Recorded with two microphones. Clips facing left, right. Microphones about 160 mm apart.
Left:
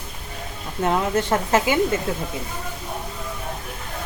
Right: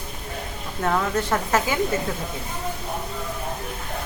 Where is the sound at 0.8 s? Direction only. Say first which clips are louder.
Left 2 dB; 20° left (ahead or behind).